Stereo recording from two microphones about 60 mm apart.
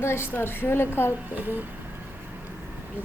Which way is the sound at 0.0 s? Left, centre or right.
Left.